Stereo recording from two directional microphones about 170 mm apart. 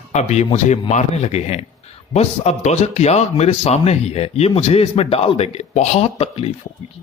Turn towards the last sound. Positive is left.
turn(degrees=35)  # may be behind; listen again after turning